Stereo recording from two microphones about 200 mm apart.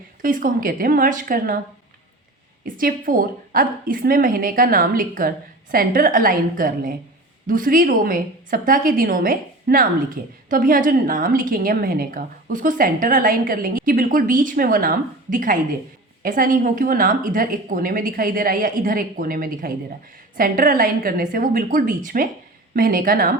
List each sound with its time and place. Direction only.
0.2 s a woman's voice: 40° right (ahead or behind)
2.6 s a woman's voice: 45° right (ahead or behind)